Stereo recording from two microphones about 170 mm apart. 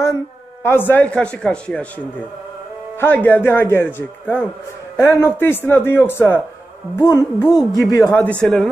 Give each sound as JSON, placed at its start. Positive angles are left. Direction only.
{"t": 0.7, "sound": "speech", "side_deg": 10}
{"t": 3.0, "sound": "speech", "side_deg": 10}
{"t": 7.0, "sound": "music", "side_deg": 20}
{"t": 8.0, "sound": "a man's voice", "side_deg": 5}